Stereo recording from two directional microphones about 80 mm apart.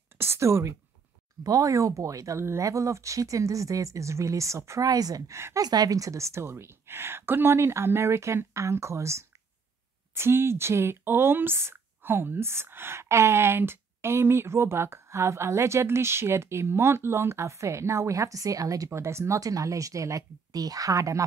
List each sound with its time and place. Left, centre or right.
0.2 s a sound: right
1.4 s speech: right
5.3 s speech: right
5.7 s speech: right
18.9 s speech: right